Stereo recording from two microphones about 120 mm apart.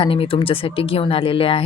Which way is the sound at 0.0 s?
50° left (ahead or behind).